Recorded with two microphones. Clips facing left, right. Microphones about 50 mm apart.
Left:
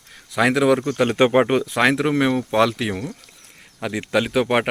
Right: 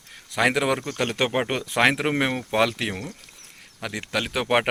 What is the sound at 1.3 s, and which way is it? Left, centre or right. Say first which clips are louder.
Speech: left 8 dB; centre.